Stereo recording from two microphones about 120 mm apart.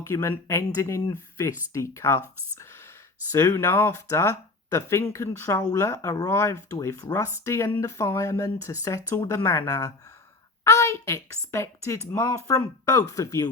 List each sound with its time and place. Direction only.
0.0 s speech: 20° left (ahead or behind)
3.5 s speech: 20° left (ahead or behind)
10.6 s a sound: 25° left (ahead or behind)
11.5 s speech: 20° left (ahead or behind)